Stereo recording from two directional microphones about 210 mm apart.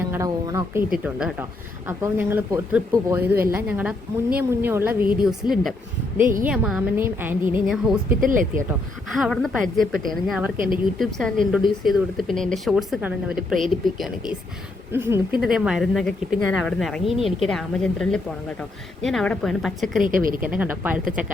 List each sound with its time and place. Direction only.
0.1 s a woman's voice: 15° right (ahead or behind)
8.2 s speech: 40° right (ahead or behind)
9.0 s speech: centre (ahead or behind)
14.9 s a woman's voice: 10° right (ahead or behind)
20.1 s speech: 40° right (ahead or behind)
20.4 s a woman's voice: 5° right (ahead or behind)